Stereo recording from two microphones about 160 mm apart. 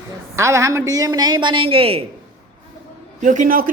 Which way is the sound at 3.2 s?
55° right (ahead or behind).